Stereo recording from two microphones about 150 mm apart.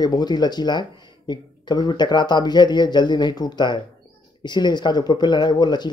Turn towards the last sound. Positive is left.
turn(degrees=30)  # may be behind; listen again after turning